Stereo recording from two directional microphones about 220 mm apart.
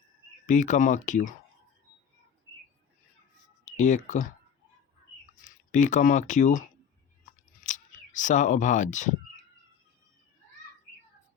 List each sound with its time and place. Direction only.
0.4 s speech: 35° left (ahead or behind)
3.7 s speech: 35° left (ahead or behind)
5.7 s speech: 35° left (ahead or behind)